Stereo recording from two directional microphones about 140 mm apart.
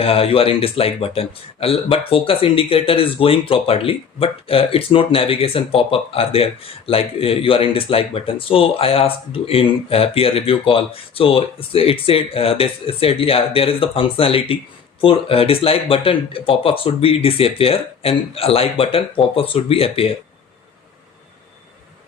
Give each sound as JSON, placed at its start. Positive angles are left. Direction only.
{"t": 0.0, "sound": "speech", "side_deg": 45}